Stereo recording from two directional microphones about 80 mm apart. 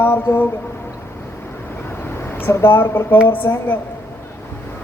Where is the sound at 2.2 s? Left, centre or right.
Left.